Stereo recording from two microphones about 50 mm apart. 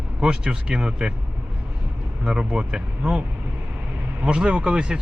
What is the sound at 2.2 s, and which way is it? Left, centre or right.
Speech, centre.